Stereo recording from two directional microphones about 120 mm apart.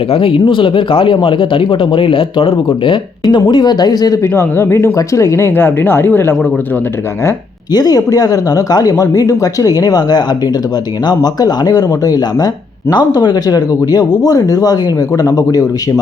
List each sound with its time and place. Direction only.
0.1 s speech: 50° left (ahead or behind)
4.2 s speech: 20° left (ahead or behind)
7.7 s speech: 30° left (ahead or behind)